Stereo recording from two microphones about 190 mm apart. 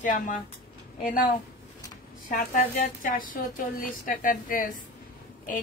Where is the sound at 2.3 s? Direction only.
45° left (ahead or behind).